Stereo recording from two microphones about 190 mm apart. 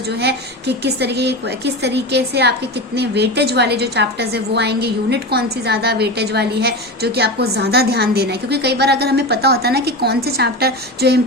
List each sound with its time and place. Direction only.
0.1 s a woman's voice: 60° right (ahead or behind)